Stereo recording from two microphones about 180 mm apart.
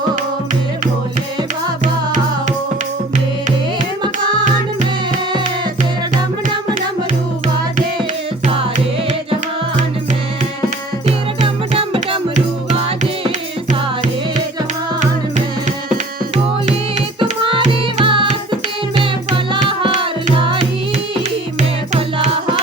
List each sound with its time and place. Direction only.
11.4 s music: 30° right (ahead or behind)
17.2 s music: 30° right (ahead or behind)